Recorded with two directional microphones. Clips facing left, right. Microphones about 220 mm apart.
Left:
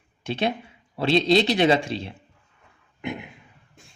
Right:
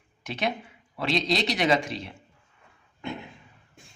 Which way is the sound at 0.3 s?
30° left (ahead or behind).